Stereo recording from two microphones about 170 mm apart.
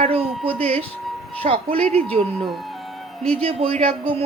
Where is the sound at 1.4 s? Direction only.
35° right (ahead or behind).